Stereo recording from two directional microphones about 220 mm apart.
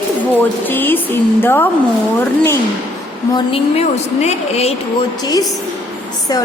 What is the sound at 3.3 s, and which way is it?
A woman's voice, 25° left (ahead or behind).